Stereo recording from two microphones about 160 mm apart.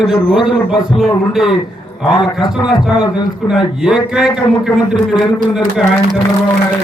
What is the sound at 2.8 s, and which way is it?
Speech, 5° right (ahead or behind).